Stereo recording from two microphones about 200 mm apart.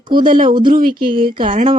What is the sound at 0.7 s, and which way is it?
Speech, 45° right (ahead or behind).